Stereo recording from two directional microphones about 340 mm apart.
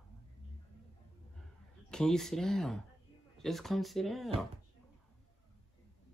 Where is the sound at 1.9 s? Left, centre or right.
Centre.